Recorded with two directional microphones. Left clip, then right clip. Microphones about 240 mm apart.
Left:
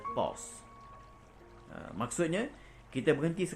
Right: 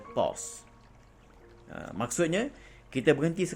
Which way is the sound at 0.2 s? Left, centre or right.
Right.